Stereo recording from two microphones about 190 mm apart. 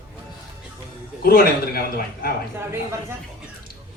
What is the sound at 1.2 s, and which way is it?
A man's voice, 55° left (ahead or behind).